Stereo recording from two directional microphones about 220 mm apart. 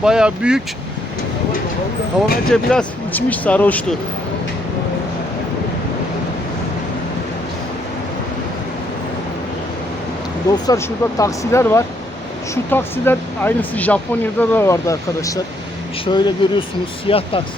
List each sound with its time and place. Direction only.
0.0 s speech: 5° right (ahead or behind)
2.2 s speech: 5° right (ahead or behind)
10.5 s speech: 15° left (ahead or behind)